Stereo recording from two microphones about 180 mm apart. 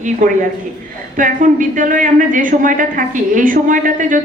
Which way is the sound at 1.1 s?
45° right (ahead or behind).